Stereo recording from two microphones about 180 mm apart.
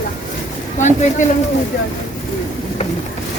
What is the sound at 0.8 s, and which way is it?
Speech, 40° left (ahead or behind).